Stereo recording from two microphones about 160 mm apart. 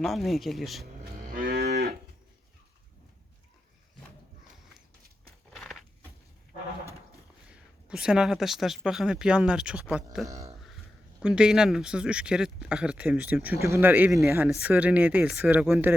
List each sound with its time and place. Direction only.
0.0 s speech: centre (ahead or behind)
1.3 s moo: 65° right (ahead or behind)
5.5 s a sound: centre (ahead or behind)
7.5 s speech: 5° right (ahead or behind)
10.2 s speech: 20° right (ahead or behind)
11.2 s speech: 5° right (ahead or behind)